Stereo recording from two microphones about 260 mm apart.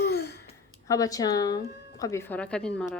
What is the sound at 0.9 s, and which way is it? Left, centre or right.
Speech, centre.